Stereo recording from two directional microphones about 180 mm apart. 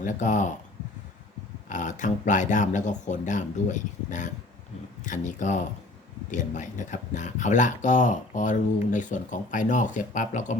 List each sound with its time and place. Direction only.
0.0 s speech: 45° left (ahead or behind)
1.7 s speech: 45° left (ahead or behind)